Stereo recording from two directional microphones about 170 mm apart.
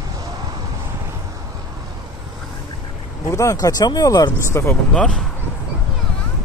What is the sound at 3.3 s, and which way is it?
Speech, 15° left (ahead or behind).